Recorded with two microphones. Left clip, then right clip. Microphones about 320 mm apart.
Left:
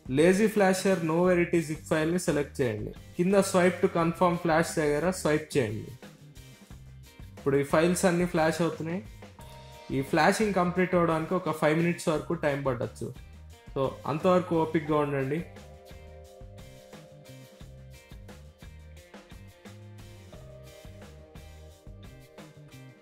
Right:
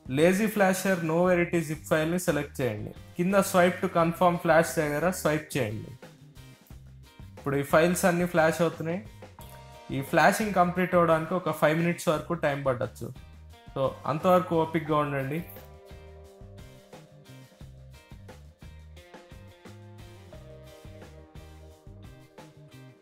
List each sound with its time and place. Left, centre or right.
0.1 s speech: centre
7.4 s speech: centre
13.7 s speech: centre